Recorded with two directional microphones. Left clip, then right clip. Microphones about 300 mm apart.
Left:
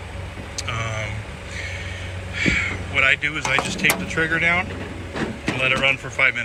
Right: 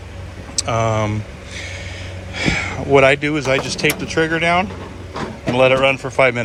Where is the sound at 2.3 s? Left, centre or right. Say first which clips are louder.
Right 1 dB; centre.